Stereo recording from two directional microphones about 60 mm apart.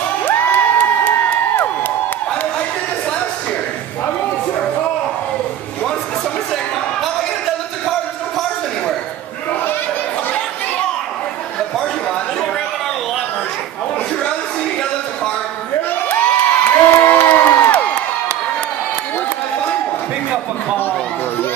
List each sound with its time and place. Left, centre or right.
0.2 s crowd: left
16.1 s crowd: left